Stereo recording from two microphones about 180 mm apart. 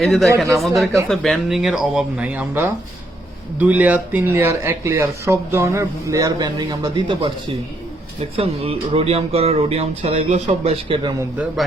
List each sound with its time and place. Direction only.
0.0 s speech: centre (ahead or behind); by 7.3 s 25° right (ahead or behind)
8.4 s speech: 30° right (ahead or behind)